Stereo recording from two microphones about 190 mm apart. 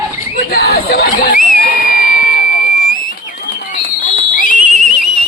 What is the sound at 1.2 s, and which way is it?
Crowd, 45° left (ahead or behind).